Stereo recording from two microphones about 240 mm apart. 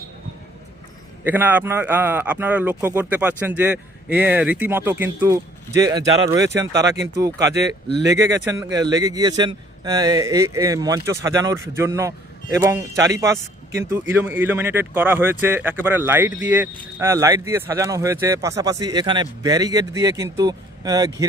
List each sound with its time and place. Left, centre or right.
1.2 s a man's voice: centre
7.4 s speech: right
8.2 s a man's voice: centre